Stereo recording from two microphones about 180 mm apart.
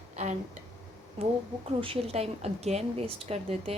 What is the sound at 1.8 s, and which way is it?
A woman's voice, 35° right (ahead or behind).